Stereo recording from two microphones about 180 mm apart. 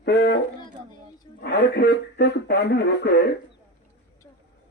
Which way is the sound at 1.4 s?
70° left (ahead or behind).